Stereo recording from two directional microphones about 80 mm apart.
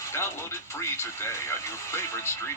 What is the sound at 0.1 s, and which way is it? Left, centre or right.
Speech, left.